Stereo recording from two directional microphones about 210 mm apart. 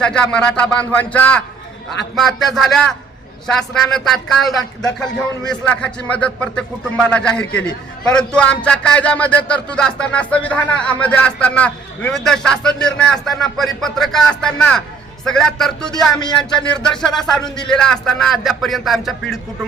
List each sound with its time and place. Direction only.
0.0 s speech: 5° left (ahead or behind)
17.4 s speech: 20° left (ahead or behind)
17.7 s speech: 5° left (ahead or behind)